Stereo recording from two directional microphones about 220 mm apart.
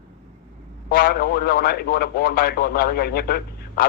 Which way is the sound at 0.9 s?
45° left (ahead or behind).